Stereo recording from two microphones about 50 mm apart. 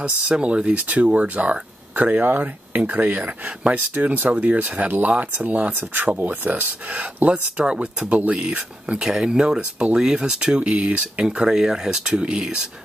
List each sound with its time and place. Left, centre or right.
0.0 s speech: right
0.7 s speech: right
3.9 s speech: right
4.3 s speech: right
5.7 s speech: right; by 12.6 s centre